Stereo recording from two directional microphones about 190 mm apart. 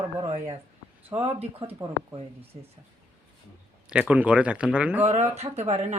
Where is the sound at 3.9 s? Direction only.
5° right (ahead or behind).